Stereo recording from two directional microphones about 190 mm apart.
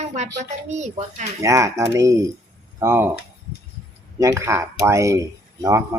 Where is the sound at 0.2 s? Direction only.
40° right (ahead or behind).